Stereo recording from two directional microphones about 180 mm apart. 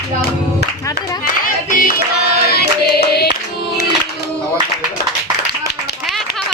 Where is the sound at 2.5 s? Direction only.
60° left (ahead or behind).